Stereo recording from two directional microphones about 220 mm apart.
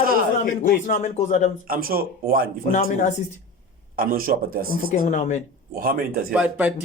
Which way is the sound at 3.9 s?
40° right (ahead or behind).